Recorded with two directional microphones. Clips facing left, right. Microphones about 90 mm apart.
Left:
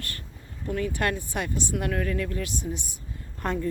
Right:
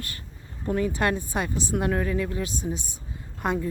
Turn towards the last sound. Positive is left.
turn(degrees=-15)  # may be behind; listen again after turning